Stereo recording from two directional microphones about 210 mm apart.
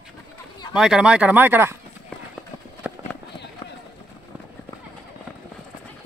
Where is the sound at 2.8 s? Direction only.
5° right (ahead or behind).